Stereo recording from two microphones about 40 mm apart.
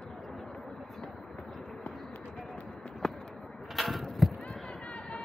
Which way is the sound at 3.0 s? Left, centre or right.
Centre.